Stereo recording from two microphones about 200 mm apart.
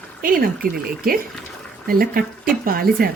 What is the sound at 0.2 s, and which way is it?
A woman's voice, 45° right (ahead or behind).